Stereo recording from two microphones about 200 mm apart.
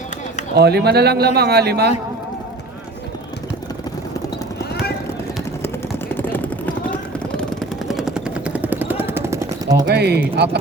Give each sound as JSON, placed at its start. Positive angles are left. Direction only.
{"t": 0.5, "sound": "speech", "side_deg": -55}
{"t": 5.6, "sound": "vehicle", "side_deg": 10}
{"t": 7.9, "sound": "vehicle", "side_deg": 0}
{"t": 9.8, "sound": "speech", "side_deg": -55}